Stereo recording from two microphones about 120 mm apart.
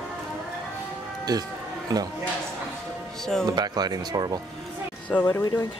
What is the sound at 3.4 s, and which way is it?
Speech, 35° right (ahead or behind).